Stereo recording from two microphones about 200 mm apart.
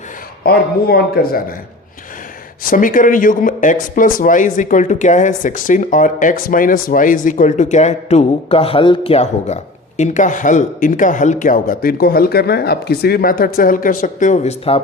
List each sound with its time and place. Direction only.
0.4 s speech: 50° left (ahead or behind)
2.6 s speech: 45° left (ahead or behind)